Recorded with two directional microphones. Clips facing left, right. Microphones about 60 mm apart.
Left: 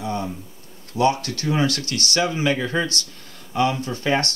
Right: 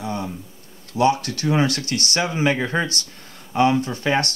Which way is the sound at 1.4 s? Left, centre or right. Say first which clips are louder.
Even; right.